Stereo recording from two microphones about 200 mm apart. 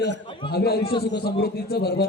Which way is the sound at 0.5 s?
50° left (ahead or behind).